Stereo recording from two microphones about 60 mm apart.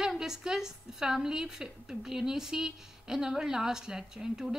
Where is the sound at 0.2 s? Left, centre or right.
Centre.